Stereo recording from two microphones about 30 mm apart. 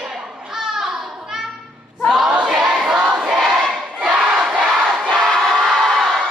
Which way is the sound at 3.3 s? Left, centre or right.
Centre.